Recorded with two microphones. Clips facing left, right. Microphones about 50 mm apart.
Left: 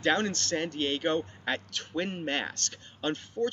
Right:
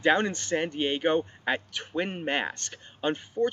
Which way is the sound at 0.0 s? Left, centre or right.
Centre.